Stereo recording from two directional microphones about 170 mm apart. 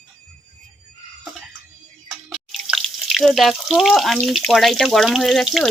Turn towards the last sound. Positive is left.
turn(degrees=0)  # may be behind; listen again after turning